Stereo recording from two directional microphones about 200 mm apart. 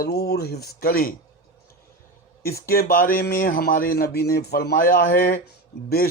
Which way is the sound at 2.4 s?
50° left (ahead or behind).